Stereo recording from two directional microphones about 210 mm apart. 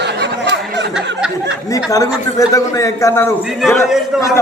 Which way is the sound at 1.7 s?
15° left (ahead or behind).